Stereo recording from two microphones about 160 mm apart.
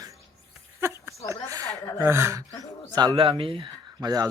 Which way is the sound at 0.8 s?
15° right (ahead or behind).